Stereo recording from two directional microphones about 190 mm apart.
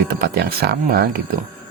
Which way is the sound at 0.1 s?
55° right (ahead or behind).